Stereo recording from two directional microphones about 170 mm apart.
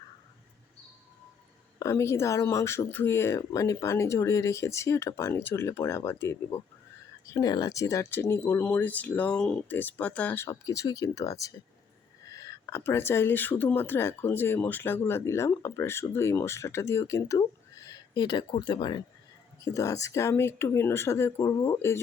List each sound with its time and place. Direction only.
1.8 s speech: 15° left (ahead or behind)